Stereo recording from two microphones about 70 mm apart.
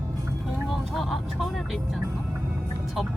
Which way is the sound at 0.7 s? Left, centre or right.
Centre.